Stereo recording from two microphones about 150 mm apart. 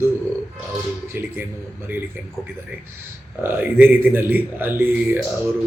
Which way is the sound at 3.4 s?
15° right (ahead or behind).